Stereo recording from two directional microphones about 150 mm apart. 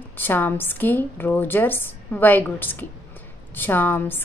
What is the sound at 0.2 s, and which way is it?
A woman's voice, 15° left (ahead or behind).